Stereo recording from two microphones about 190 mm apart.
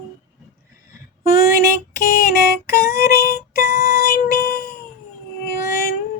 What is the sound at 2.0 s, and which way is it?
Music, 45° left (ahead or behind).